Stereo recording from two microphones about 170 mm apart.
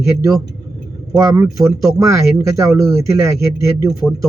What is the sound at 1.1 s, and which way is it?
Speech, 20° right (ahead or behind).